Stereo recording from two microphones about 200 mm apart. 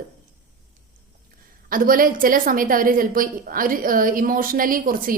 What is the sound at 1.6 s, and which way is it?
A woman's voice, 45° right (ahead or behind).